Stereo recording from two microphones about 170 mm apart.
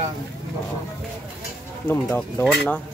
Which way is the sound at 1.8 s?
10° left (ahead or behind).